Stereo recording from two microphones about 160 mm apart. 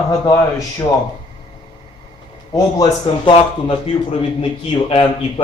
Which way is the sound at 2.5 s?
30° left (ahead or behind).